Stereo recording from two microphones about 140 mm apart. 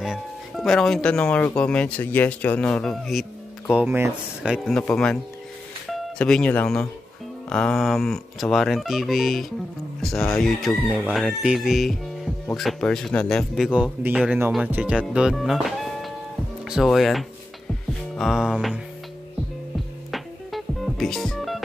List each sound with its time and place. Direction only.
0.0 s speech: centre (ahead or behind)
3.7 s speech: 15° right (ahead or behind)
4.4 s speech: 5° right (ahead or behind)
4.7 s speech: 5° left (ahead or behind)
20.1 s music: centre (ahead or behind)